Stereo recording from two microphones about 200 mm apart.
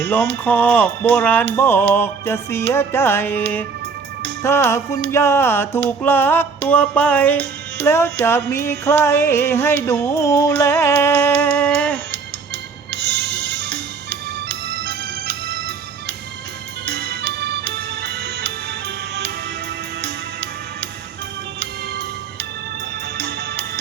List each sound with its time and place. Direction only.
0.0 s music: 10° left (ahead or behind)
12.9 s music: 55° right (ahead or behind)
16.8 s music: 55° right (ahead or behind)
21.6 s music: 55° right (ahead or behind)